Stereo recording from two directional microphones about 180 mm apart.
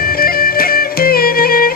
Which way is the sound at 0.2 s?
55° left (ahead or behind).